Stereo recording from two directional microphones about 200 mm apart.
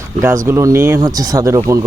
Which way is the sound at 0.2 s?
15° right (ahead or behind).